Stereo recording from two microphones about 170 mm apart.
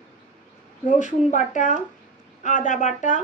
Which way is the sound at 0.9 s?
45° left (ahead or behind).